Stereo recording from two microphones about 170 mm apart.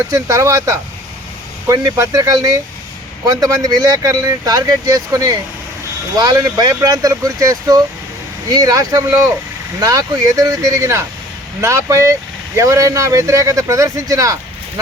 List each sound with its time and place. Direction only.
0.1 s speech: 15° right (ahead or behind)